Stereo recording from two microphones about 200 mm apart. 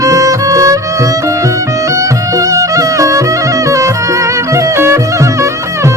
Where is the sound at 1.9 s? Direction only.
15° right (ahead or behind).